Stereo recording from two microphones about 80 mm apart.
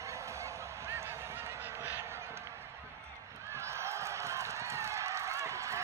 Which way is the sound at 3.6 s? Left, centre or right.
Right.